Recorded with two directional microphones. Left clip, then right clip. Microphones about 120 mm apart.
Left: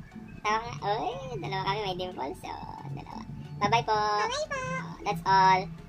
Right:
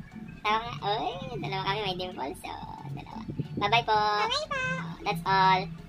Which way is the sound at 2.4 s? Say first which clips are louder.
Even; centre (ahead or behind).